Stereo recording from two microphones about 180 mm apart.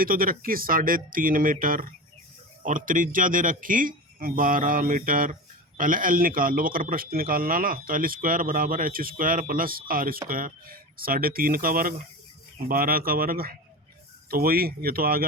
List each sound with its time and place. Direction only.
0.0 s speech: 50° right (ahead or behind)